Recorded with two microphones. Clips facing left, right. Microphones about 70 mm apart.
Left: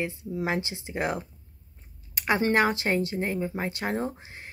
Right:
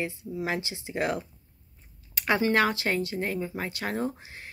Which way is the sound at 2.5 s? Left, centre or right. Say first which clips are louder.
Left 1 dB; left.